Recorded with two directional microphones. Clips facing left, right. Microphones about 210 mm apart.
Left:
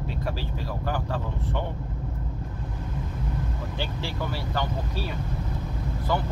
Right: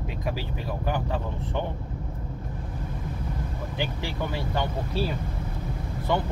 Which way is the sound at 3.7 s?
15° right (ahead or behind).